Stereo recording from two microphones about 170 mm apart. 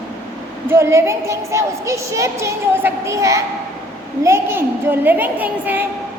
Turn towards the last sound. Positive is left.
turn(degrees=-10)  # may be behind; listen again after turning